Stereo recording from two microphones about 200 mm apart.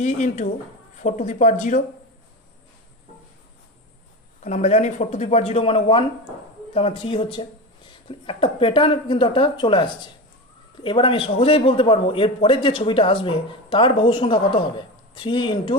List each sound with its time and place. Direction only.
0.0 s speech: 35° left (ahead or behind)
4.4 s a man's voice: 35° left (ahead or behind)